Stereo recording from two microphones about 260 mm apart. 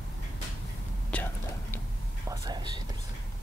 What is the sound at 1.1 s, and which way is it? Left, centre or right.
Whispering, centre.